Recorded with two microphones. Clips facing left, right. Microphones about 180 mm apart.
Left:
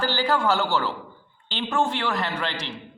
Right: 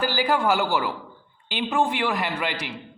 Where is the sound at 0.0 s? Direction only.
10° right (ahead or behind).